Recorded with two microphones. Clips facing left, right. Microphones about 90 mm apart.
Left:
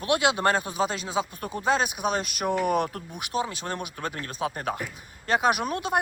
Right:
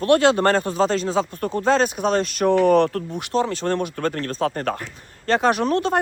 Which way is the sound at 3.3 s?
30° right (ahead or behind).